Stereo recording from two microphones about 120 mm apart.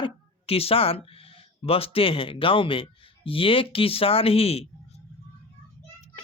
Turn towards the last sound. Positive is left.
turn(degrees=55)  # may be behind; listen again after turning